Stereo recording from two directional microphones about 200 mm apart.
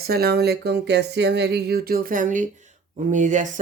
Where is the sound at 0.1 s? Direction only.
50° right (ahead or behind).